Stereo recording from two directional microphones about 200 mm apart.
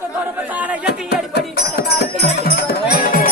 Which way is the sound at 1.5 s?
50° left (ahead or behind).